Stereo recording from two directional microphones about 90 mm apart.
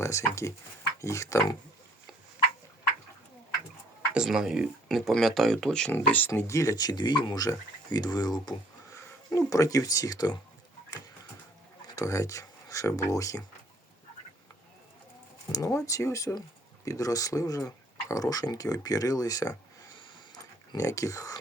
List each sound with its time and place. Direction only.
0.0 s speech: 35° left (ahead or behind)
4.1 s speech: 5° right (ahead or behind)
6.0 s speech: 15° left (ahead or behind)
6.5 s speech: 35° left (ahead or behind)
9.3 s speech: 40° left (ahead or behind)
11.9 s speech: 40° left (ahead or behind)
15.5 s speech: 40° left (ahead or behind)